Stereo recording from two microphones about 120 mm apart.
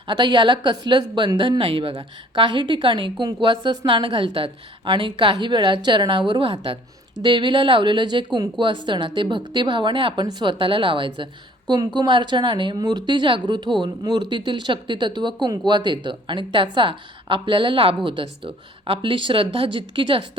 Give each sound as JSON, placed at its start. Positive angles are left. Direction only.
{"t": 0.1, "sound": "speech", "side_deg": -40}